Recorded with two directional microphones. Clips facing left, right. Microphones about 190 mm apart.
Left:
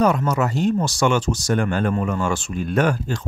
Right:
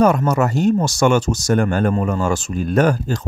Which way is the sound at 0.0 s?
45° right (ahead or behind).